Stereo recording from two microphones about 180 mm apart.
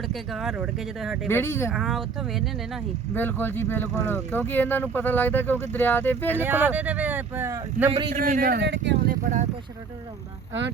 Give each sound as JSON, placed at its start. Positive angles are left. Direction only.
{"t": 0.1, "sound": "speech", "side_deg": 0}
{"t": 1.3, "sound": "speech", "side_deg": 15}
{"t": 1.7, "sound": "speech", "side_deg": 0}
{"t": 3.2, "sound": "speech", "side_deg": 10}
{"t": 6.3, "sound": "speech", "side_deg": -10}
{"t": 7.9, "sound": "speech", "side_deg": -30}
{"t": 8.1, "sound": "speech", "side_deg": -50}